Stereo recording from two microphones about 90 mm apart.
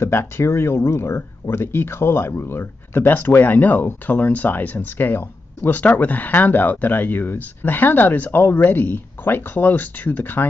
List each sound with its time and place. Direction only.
0.0 s speech: 30° left (ahead or behind)